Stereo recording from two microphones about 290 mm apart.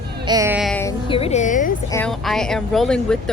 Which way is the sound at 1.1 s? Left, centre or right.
Centre.